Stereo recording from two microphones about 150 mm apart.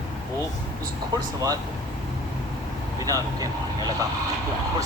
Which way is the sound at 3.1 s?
25° right (ahead or behind).